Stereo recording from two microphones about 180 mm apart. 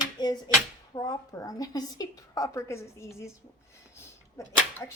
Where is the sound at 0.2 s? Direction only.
25° left (ahead or behind).